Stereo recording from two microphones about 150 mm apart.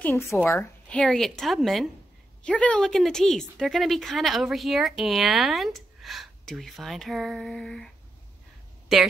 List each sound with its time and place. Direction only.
0.0 s speech: 15° left (ahead or behind)
0.9 s speech: centre (ahead or behind)
8.9 s speech: centre (ahead or behind)